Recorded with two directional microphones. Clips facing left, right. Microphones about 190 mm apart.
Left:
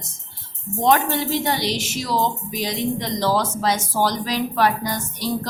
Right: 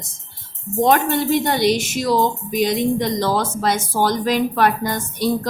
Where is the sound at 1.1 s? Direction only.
50° right (ahead or behind).